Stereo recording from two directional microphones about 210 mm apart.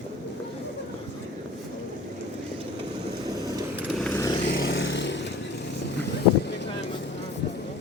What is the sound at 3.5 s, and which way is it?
Vehicle, 10° right (ahead or behind).